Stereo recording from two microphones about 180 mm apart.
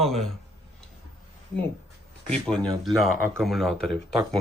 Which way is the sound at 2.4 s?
5° left (ahead or behind).